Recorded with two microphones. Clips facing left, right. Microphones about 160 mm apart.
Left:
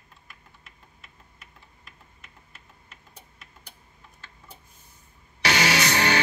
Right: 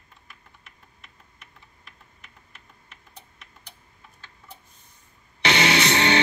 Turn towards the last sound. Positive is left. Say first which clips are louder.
# right 3 dB
turn(degrees=-25)  # may be behind; listen again after turning